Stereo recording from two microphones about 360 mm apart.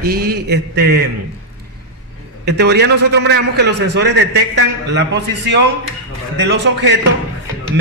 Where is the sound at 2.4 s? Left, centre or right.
Right.